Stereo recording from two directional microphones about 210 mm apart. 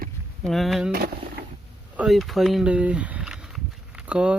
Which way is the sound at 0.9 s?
45° right (ahead or behind).